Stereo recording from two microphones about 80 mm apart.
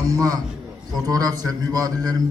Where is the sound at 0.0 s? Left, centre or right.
Right.